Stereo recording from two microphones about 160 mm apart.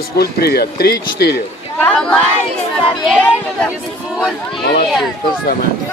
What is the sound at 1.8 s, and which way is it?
Speech, 5° left (ahead or behind).